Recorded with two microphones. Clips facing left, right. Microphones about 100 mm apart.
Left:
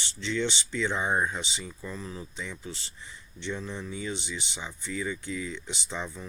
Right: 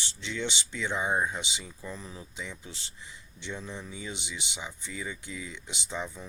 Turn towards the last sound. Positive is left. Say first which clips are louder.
# even
turn(degrees=-10)  # may be behind; listen again after turning